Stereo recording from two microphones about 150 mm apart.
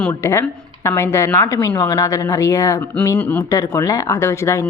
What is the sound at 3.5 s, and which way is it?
A woman's voice, 20° left (ahead or behind).